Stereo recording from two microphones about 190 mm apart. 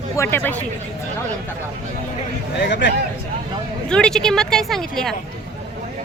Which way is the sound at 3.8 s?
5° left (ahead or behind).